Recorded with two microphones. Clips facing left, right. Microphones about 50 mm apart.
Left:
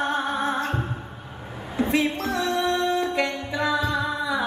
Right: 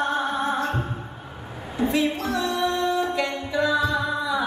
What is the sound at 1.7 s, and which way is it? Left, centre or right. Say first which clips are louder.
Music: even; left.